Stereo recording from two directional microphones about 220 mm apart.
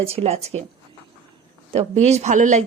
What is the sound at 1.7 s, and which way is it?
Speech, 30° right (ahead or behind).